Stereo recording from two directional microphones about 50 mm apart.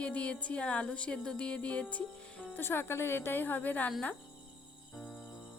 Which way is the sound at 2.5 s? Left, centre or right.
Left.